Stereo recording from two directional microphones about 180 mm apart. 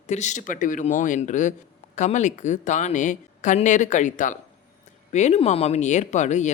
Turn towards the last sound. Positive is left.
turn(degrees=40)  # may be behind; listen again after turning